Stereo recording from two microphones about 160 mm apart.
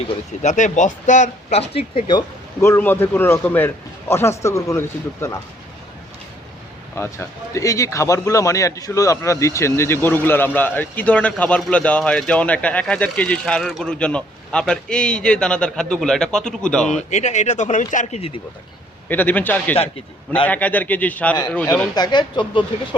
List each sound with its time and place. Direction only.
0.4 s speech: 50° left (ahead or behind); by 2.2 s 30° left (ahead or behind)
2.6 s a man's voice: 15° left (ahead or behind)
6.9 s a man's voice: 15° left (ahead or behind)
16.8 s speech: 45° left (ahead or behind)
19.0 s a man's voice: 10° left (ahead or behind)
21.9 s speech: 25° left (ahead or behind)